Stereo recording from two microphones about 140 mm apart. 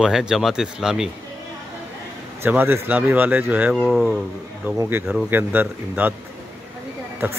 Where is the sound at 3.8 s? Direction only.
5° left (ahead or behind).